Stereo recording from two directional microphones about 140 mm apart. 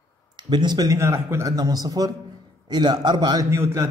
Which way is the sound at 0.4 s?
30° right (ahead or behind).